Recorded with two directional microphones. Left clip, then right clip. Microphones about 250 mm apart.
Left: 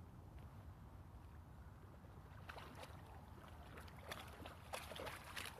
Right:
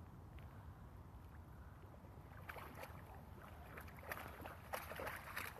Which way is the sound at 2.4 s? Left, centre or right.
Right.